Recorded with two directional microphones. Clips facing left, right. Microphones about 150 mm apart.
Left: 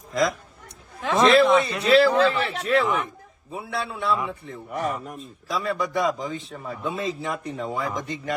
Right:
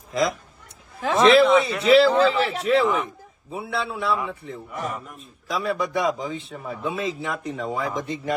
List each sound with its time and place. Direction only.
0.1 s speech: centre (ahead or behind)
4.7 s speech: 40° left (ahead or behind)
5.5 s speech: centre (ahead or behind)